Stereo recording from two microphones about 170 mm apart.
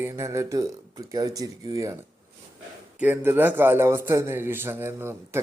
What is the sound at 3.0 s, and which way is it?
A man's voice, 10° right (ahead or behind).